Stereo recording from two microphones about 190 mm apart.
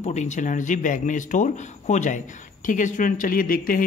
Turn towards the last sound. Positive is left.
turn(degrees=50)  # may be behind; listen again after turning